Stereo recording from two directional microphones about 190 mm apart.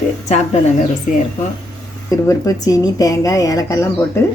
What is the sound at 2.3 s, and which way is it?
Speech, 20° left (ahead or behind).